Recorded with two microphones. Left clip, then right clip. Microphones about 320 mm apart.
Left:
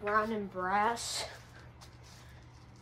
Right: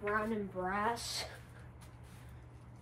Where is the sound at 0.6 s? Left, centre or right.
Left.